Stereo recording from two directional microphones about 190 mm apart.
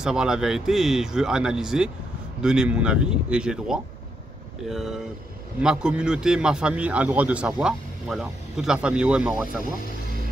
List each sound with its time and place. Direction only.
0.0 s a man's voice: 5° right (ahead or behind)